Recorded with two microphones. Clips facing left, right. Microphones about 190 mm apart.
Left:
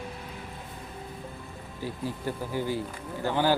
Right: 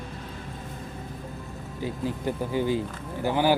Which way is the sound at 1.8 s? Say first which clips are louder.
Right 4 dB; 20° right (ahead or behind).